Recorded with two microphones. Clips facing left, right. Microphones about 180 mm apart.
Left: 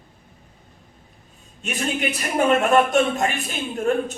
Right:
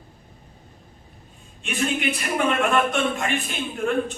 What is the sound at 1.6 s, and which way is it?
A man's voice, 40° left (ahead or behind).